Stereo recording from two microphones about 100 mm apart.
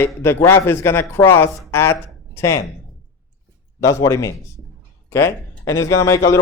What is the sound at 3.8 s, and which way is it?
A man's voice, 30° left (ahead or behind).